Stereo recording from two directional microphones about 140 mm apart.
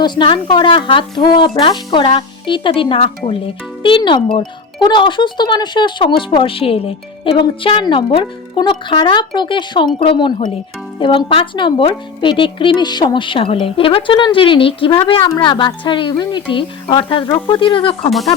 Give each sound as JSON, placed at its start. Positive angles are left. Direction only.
{"t": 0.0, "sound": "a child's voice", "side_deg": 35}